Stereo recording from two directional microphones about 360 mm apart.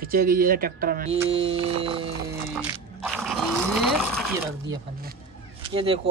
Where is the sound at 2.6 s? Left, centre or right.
Centre.